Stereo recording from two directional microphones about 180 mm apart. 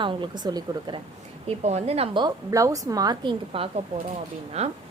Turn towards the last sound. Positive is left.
turn(degrees=-35)  # may be behind; listen again after turning